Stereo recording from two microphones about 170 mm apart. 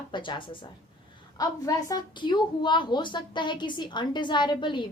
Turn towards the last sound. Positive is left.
turn(degrees=25)  # may be behind; listen again after turning